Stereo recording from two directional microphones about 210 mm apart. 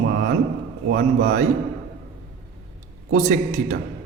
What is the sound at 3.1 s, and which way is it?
Speech, 40° right (ahead or behind).